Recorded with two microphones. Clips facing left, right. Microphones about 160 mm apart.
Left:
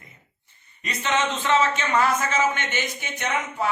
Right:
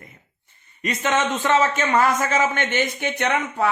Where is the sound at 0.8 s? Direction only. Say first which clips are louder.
Right 3 dB; 50° right (ahead or behind).